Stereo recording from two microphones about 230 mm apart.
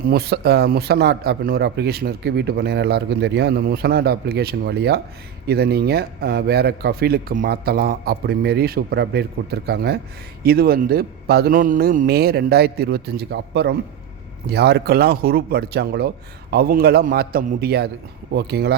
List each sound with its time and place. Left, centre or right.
0.0 s a man's voice: right